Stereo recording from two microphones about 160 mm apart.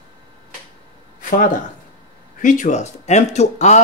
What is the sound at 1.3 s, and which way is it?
Speech, 55° left (ahead or behind).